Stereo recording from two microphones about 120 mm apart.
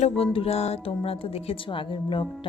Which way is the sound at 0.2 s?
55° left (ahead or behind).